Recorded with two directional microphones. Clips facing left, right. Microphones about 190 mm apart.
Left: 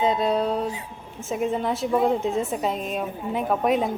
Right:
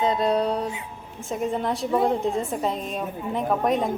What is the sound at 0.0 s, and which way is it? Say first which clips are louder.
A woman's voice: even; centre (ahead or behind).